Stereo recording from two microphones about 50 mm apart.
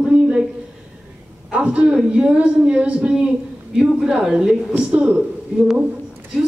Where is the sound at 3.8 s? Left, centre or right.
Centre.